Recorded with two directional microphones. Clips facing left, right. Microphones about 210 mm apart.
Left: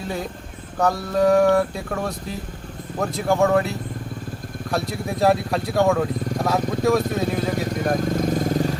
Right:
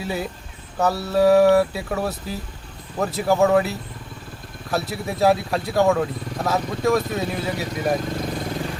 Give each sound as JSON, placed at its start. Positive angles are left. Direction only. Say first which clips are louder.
{"t": 0.0, "sound": "speech", "louder": "right 1 dB", "side_deg": -5}
{"t": 8.1, "sound": "vehicle", "louder": "left 6 dB", "side_deg": 45}